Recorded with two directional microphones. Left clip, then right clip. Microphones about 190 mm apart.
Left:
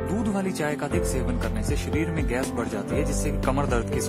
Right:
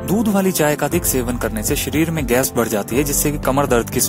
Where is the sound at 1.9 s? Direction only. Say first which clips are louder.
Right 10 dB; 40° right (ahead or behind).